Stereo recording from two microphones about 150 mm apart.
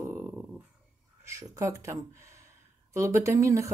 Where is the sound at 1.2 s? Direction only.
20° right (ahead or behind).